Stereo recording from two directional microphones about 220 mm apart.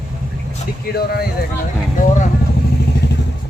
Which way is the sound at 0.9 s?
45° left (ahead or behind).